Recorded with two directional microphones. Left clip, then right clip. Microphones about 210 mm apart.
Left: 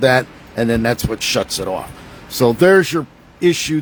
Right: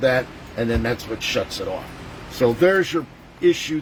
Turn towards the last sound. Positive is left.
turn(degrees=50)  # may be behind; listen again after turning